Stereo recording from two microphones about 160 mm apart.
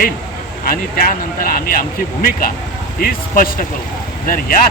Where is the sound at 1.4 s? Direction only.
60° left (ahead or behind).